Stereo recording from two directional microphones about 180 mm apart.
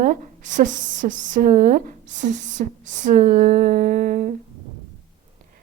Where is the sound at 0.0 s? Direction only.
45° right (ahead or behind).